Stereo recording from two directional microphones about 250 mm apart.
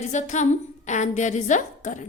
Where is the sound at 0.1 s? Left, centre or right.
Left.